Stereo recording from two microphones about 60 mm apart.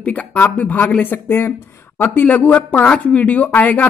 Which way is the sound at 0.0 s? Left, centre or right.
Left.